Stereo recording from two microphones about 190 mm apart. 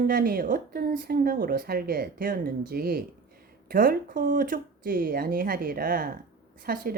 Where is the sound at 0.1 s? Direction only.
50° right (ahead or behind).